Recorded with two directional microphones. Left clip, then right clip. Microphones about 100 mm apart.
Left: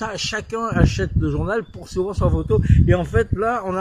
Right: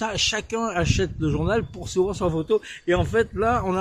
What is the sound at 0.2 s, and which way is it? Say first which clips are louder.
Speech: even; 25° right (ahead or behind).